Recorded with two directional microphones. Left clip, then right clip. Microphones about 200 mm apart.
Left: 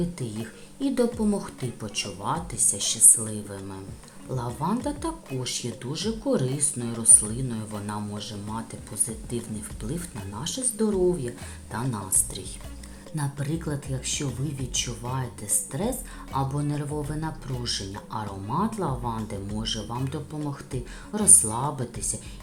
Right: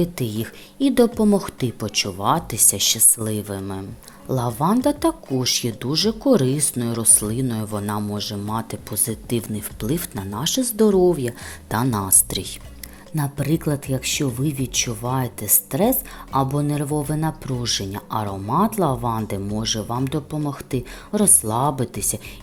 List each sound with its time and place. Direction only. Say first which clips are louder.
0.0 s speech: right 8 dB; 40° right (ahead or behind)